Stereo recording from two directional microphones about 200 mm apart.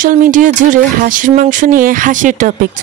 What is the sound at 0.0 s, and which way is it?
Speech, 40° right (ahead or behind).